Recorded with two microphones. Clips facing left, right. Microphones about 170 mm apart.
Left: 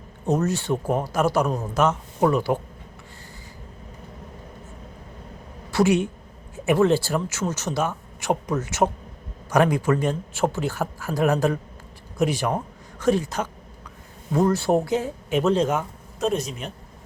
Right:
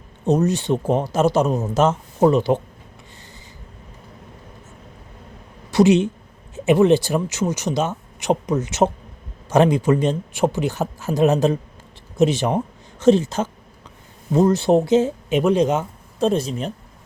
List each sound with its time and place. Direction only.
0.3 s speech: 20° right (ahead or behind)
5.7 s a woman's voice: 20° right (ahead or behind)